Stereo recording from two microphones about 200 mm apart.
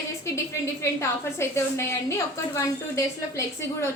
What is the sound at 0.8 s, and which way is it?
A woman's voice, 15° left (ahead or behind).